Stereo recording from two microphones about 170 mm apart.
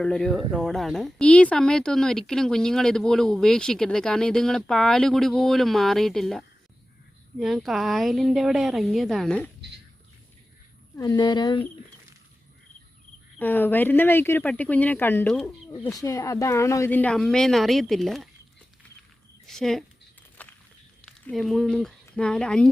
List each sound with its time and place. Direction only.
0.0 s speech: 5° left (ahead or behind)
10.9 s speech: 20° left (ahead or behind)
13.4 s speech: 10° left (ahead or behind)
15.7 s speech: 25° left (ahead or behind); by 18.3 s centre (ahead or behind)
19.5 s a woman's voice: centre (ahead or behind)
20.4 s a sound: 10° left (ahead or behind)
21.0 s speech: centre (ahead or behind)